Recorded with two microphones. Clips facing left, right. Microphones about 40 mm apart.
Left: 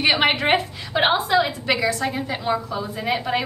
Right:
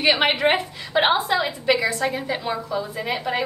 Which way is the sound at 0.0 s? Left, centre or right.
Centre.